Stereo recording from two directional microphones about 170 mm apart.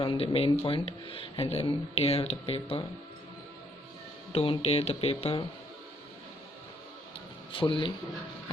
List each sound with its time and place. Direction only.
0.0 s speech: 35° left (ahead or behind)
4.3 s speech: 35° left (ahead or behind)
7.5 s speech: 30° left (ahead or behind)